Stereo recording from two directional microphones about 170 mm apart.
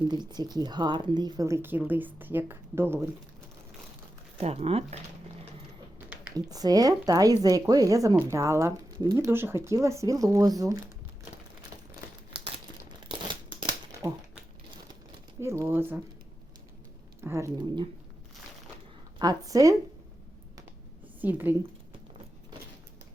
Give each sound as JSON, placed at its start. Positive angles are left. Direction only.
{"t": 0.1, "sound": "speech", "side_deg": -25}
{"t": 4.4, "sound": "speech", "side_deg": -35}
{"t": 6.3, "sound": "speech", "side_deg": -20}
{"t": 13.1, "sound": "a sound", "side_deg": -30}
{"t": 15.4, "sound": "speech", "side_deg": -15}
{"t": 17.2, "sound": "speech", "side_deg": -15}
{"t": 19.2, "sound": "speech", "side_deg": -20}
{"t": 21.2, "sound": "a woman's voice", "side_deg": -10}